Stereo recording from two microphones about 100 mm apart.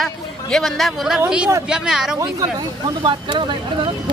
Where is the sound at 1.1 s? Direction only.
10° right (ahead or behind).